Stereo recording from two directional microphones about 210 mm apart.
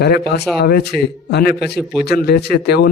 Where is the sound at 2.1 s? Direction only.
50° left (ahead or behind).